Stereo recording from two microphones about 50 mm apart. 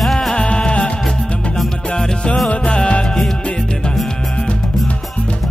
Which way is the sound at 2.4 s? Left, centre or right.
Centre.